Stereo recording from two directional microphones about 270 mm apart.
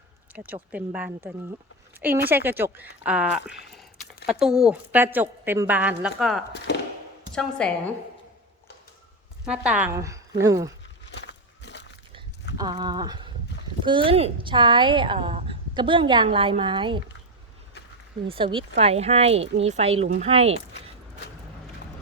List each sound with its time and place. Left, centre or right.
0.3 s a woman's voice: centre
2.3 s a woman's voice: centre
7.6 s a woman's voice: centre
9.5 s a woman's voice: centre
11.1 s walk: left
12.5 s a woman's voice: centre
18.3 s speech: centre